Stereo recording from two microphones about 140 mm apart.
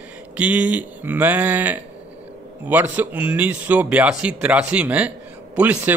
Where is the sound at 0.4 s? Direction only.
10° right (ahead or behind).